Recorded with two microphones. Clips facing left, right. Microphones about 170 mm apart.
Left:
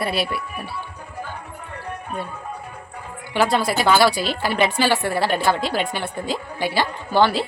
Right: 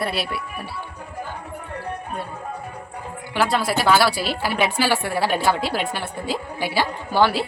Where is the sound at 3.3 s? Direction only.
Centre (ahead or behind).